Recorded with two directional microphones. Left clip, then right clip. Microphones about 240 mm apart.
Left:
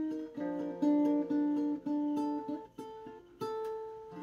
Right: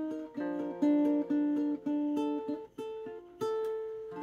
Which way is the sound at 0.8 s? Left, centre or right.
Right.